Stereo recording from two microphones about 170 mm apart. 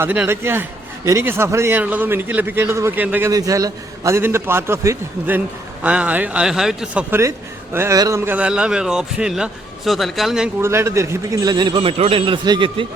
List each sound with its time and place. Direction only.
0.0 s a man's voice: 10° right (ahead or behind)
10.6 s a man's voice: 15° right (ahead or behind)